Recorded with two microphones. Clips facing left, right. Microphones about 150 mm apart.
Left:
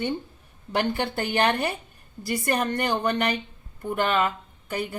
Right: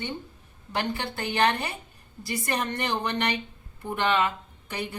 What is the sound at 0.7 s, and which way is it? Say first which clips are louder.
A woman's voice: left 5 dB; 50° left (ahead or behind).